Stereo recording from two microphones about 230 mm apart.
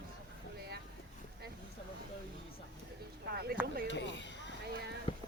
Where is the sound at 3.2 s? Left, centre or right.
Right.